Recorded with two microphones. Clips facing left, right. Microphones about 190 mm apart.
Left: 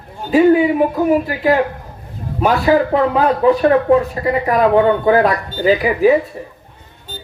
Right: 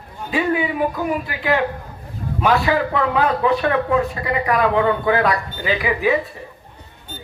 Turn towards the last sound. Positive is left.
turn(degrees=40)  # may be behind; listen again after turning